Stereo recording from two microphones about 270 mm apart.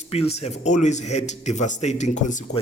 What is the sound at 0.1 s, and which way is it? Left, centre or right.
Speech, left.